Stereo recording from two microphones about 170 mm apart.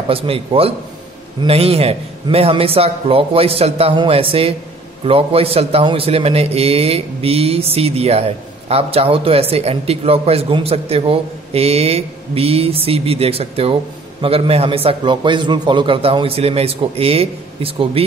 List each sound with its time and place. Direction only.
0.1 s a man's voice: 35° right (ahead or behind)